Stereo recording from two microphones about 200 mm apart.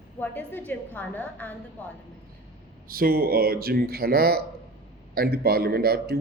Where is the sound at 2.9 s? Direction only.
45° right (ahead or behind).